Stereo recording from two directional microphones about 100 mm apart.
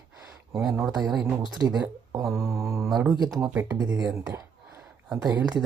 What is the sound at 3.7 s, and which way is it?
Speech, 35° right (ahead or behind).